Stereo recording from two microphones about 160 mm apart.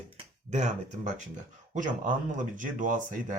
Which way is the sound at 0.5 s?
50° right (ahead or behind).